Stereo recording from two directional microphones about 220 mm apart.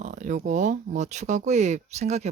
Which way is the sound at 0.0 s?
35° right (ahead or behind).